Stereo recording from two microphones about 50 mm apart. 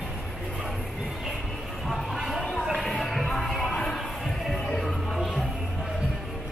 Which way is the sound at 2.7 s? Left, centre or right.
Centre.